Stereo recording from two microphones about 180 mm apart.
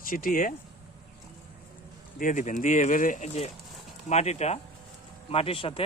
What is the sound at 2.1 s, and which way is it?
Speech, 45° left (ahead or behind).